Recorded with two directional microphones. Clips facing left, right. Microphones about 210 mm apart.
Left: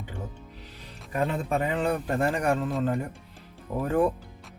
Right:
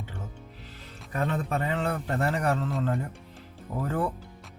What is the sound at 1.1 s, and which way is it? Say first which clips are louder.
A man's voice: left 2 dB; 15° left (ahead or behind).